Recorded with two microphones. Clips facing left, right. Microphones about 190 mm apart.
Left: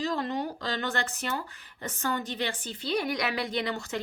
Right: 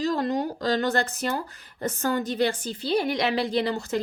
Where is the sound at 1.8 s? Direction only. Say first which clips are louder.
Right 6 dB; 45° right (ahead or behind).